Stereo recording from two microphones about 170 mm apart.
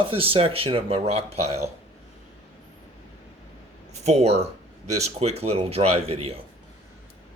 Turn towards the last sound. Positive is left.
turn(degrees=-35)  # may be behind; listen again after turning